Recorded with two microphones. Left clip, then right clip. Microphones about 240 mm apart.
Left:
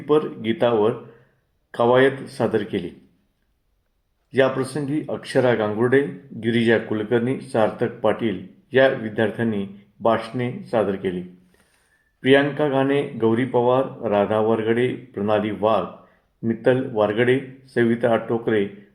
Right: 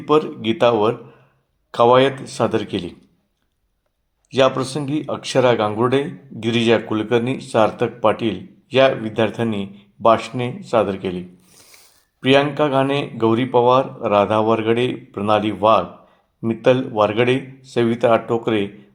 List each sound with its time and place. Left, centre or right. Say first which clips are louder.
0.0 s speech: right 3 dB; right
4.4 s speech: right 3 dB; right
12.2 s speech: right 2 dB; right